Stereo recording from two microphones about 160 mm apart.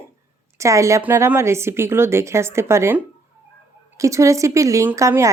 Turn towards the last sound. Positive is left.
turn(degrees=-20)  # may be behind; listen again after turning